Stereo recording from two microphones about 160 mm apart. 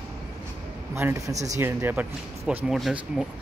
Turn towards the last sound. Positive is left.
turn(degrees=0)  # may be behind; listen again after turning